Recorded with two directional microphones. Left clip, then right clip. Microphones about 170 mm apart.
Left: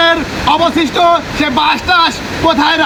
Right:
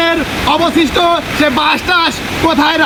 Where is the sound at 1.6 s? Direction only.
30° left (ahead or behind).